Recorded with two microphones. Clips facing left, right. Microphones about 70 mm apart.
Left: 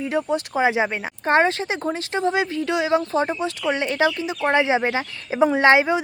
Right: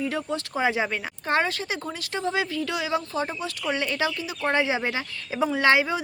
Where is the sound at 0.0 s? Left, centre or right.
Left.